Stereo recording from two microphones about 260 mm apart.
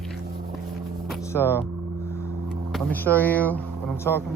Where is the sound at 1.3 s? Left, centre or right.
Centre.